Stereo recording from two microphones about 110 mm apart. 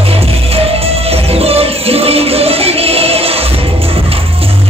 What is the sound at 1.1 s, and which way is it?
Music, 65° right (ahead or behind).